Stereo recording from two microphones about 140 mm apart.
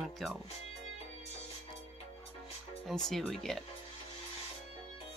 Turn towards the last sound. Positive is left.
turn(degrees=5)  # may be behind; listen again after turning